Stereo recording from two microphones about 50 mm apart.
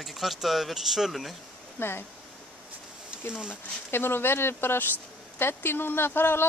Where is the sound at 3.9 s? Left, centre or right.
Left.